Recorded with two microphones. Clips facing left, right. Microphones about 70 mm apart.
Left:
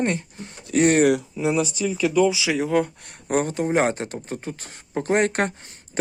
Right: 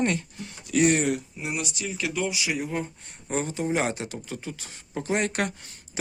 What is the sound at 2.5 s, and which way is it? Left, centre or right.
Speech, left.